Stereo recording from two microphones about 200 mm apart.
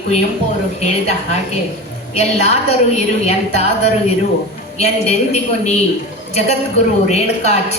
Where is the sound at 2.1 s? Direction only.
30° left (ahead or behind).